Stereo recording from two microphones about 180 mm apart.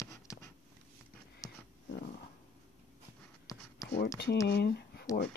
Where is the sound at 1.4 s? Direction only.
20° left (ahead or behind).